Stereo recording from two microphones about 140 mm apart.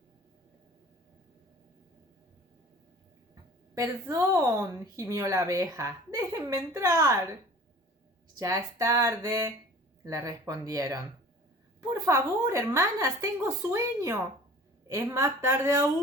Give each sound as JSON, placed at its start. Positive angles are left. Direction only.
{"t": 3.8, "sound": "a woman's voice", "side_deg": -25}
{"t": 8.4, "sound": "a woman's voice", "side_deg": -25}